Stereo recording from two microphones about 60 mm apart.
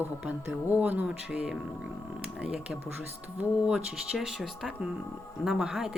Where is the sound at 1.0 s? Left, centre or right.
Centre.